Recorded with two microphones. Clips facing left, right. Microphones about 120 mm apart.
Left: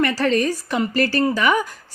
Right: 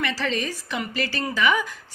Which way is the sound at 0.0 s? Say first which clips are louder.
Left 8 dB; 50° left (ahead or behind).